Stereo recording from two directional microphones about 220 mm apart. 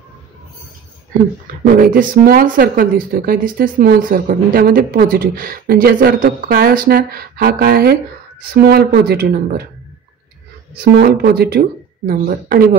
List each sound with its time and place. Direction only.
1.6 s speech: 40° right (ahead or behind)
11.0 s speech: 45° right (ahead or behind)